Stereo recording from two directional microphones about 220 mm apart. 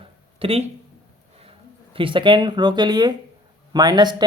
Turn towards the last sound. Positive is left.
turn(degrees=-20)  # may be behind; listen again after turning